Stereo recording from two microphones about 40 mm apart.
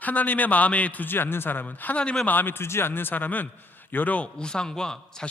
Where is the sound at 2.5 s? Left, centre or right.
Left.